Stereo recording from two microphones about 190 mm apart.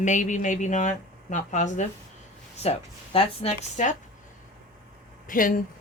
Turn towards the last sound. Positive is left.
turn(degrees=45)  # may be behind; listen again after turning